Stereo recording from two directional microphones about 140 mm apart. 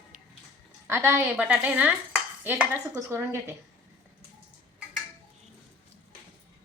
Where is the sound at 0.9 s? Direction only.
15° right (ahead or behind).